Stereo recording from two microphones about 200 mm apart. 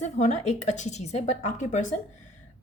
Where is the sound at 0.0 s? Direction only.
35° left (ahead or behind).